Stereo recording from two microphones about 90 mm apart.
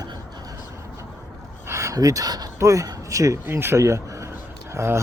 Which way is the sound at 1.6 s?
35° right (ahead or behind).